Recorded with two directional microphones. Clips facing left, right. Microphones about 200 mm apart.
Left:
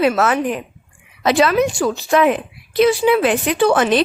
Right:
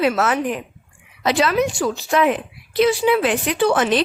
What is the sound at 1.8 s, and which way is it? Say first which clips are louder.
Speech: left 3 dB; 90° left.